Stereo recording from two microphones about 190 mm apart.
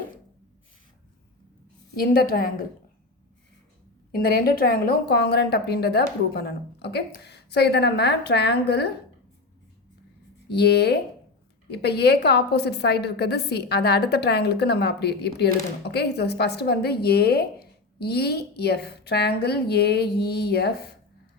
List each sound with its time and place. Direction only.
2.0 s a woman's voice: 50° left (ahead or behind)
4.1 s a woman's voice: 50° left (ahead or behind)
10.5 s a woman's voice: 60° left (ahead or behind)